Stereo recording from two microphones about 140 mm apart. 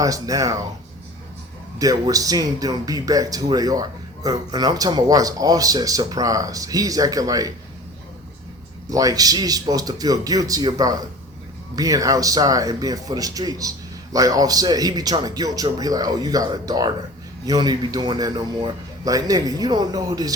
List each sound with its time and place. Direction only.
0.0 s speech: 25° right (ahead or behind)
1.8 s speech: 25° right (ahead or behind)
8.9 s speech: 25° right (ahead or behind)